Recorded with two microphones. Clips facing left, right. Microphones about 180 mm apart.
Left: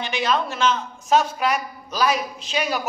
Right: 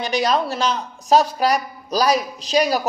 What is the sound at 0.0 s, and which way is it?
A woman's voice, 40° right (ahead or behind).